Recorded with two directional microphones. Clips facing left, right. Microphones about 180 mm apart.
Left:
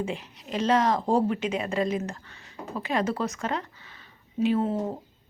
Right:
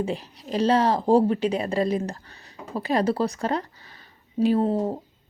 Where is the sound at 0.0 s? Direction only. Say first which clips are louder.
Right 4 dB; 35° right (ahead or behind).